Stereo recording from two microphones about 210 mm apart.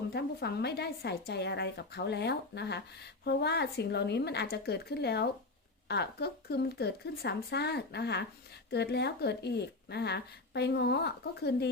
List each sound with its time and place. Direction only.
0.1 s speech: 50° left (ahead or behind)